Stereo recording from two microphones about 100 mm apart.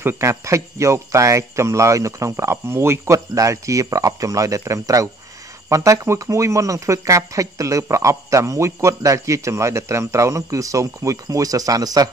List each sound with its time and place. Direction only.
0.0 s speech: 30° right (ahead or behind)